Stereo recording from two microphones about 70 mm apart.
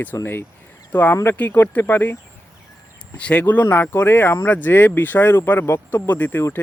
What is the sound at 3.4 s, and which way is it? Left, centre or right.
Speech, left.